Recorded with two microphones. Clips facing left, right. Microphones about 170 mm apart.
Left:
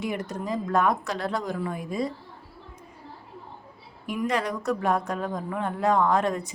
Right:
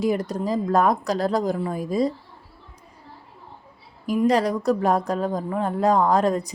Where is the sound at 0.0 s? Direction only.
35° right (ahead or behind).